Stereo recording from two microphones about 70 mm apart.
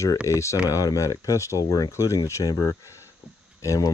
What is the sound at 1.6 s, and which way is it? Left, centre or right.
Speech, left.